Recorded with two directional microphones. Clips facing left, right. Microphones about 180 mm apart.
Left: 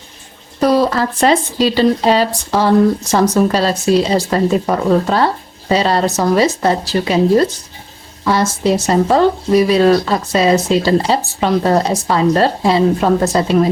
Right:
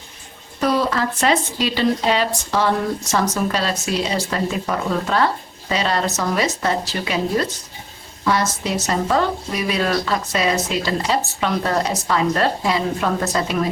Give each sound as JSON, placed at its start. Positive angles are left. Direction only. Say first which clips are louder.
{"t": 0.6, "sound": "speech", "louder": "left 6 dB", "side_deg": 35}